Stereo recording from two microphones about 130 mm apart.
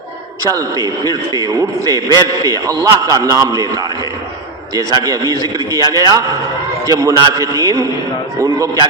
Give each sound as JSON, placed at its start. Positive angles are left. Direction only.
{"t": 0.4, "sound": "a man's voice", "side_deg": -25}
{"t": 4.7, "sound": "a man's voice", "side_deg": -30}